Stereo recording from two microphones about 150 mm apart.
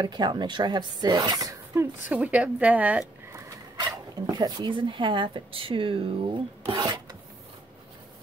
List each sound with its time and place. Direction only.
0.0 s speech: 30° right (ahead or behind)
2.0 s a woman's voice: 10° right (ahead or behind)
3.3 s speech: 25° right (ahead or behind)